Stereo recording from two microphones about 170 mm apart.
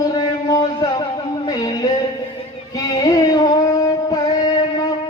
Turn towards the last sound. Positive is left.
turn(degrees=25)  # may be behind; listen again after turning